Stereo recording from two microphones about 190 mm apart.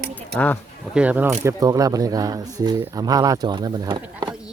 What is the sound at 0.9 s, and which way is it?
Speech, 5° right (ahead or behind).